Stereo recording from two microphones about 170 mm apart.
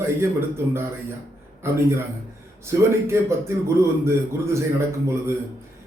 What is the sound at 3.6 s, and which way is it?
A man's voice, 15° right (ahead or behind).